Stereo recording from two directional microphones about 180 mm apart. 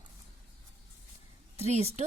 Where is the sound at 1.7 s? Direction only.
35° right (ahead or behind).